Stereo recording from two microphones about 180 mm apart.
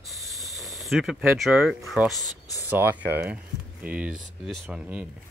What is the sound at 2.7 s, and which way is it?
Speech, 10° right (ahead or behind).